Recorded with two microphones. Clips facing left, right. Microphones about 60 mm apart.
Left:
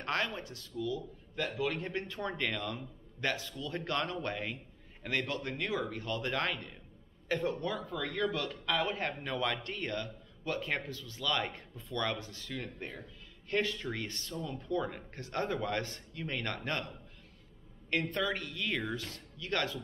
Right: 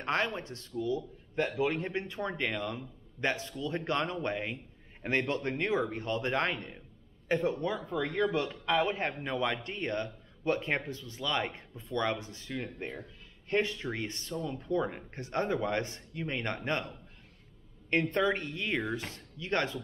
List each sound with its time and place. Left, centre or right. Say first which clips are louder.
0.0 s a man's voice: right 3 dB; right
17.8 s a woman's voice: right 5 dB; right